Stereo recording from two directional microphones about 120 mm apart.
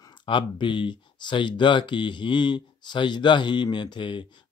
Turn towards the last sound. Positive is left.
turn(degrees=40)  # may be behind; listen again after turning